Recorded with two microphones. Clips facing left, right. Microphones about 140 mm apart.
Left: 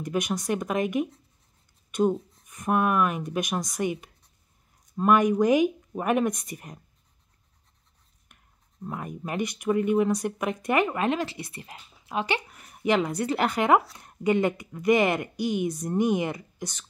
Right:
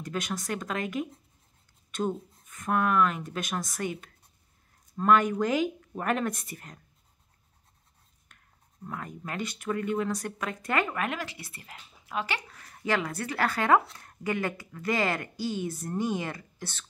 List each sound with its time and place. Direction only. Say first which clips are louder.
0.0 s speech: left 5 dB; 20° left (ahead or behind)
8.3 s writing: left 1 dB; 20° left (ahead or behind)
8.8 s speech: left 4 dB; 20° left (ahead or behind)